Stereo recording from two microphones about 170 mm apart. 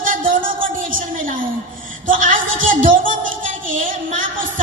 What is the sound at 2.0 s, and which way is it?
Speech, 50° right (ahead or behind).